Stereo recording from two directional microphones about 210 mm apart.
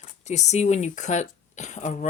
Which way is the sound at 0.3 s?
35° left (ahead or behind).